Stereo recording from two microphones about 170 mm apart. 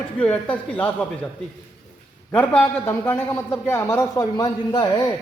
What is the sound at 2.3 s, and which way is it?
A man's voice, 10° left (ahead or behind).